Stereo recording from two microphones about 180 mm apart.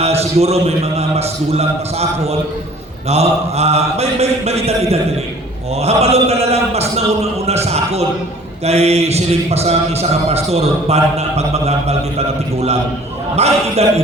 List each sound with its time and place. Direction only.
0.0 s a man's voice: 35° right (ahead or behind)
13.3 s a man's voice: 35° right (ahead or behind)